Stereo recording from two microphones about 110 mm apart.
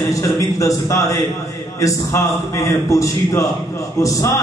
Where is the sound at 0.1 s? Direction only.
30° left (ahead or behind).